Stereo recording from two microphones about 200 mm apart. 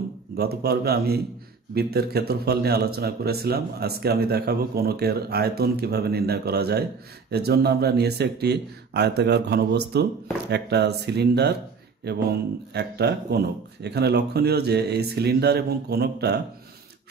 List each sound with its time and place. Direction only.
0.4 s speech: 50° right (ahead or behind)